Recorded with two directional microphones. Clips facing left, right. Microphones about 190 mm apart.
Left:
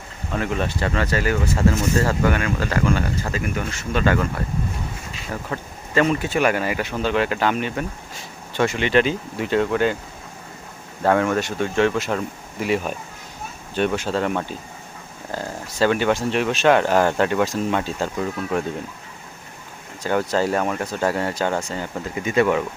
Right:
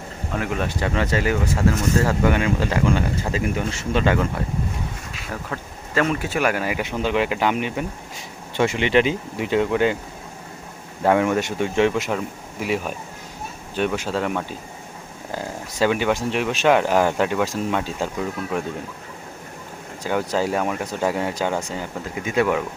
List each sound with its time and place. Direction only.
0.3 s speech: 10° right (ahead or behind)
1.5 s speech: 5° right (ahead or behind)
2.2 s speech: 20° right (ahead or behind)
5.1 s speech: centre (ahead or behind); by 10.0 s 15° right (ahead or behind)
11.0 s speech: 15° right (ahead or behind)
12.1 s speech: 5° right (ahead or behind)
20.1 s speech: 10° right (ahead or behind)